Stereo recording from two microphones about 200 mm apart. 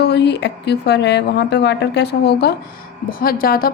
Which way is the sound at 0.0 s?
55° left (ahead or behind).